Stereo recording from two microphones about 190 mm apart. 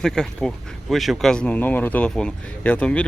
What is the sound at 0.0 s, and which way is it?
Speech, 5° left (ahead or behind).